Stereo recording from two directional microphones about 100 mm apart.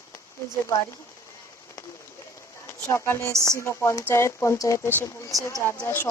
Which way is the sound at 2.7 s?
25° left (ahead or behind).